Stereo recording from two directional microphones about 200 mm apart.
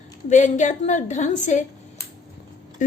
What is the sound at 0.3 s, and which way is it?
A woman's voice, 40° left (ahead or behind).